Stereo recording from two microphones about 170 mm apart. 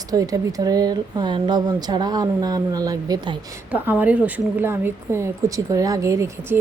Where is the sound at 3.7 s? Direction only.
10° right (ahead or behind).